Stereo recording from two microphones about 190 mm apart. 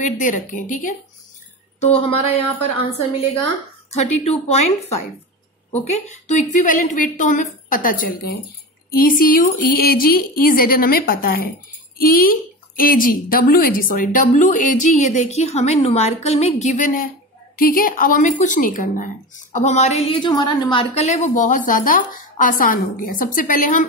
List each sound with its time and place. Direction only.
0.0 s a woman's voice: 40° left (ahead or behind)
1.8 s a woman's voice: 30° left (ahead or behind)
3.9 s a woman's voice: 35° left (ahead or behind)